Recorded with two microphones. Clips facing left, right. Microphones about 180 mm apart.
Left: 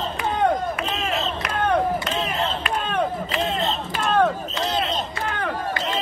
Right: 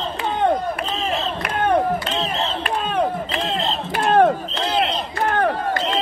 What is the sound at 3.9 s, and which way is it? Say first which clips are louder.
Crowd: right 5 dB; 55° right (ahead or behind).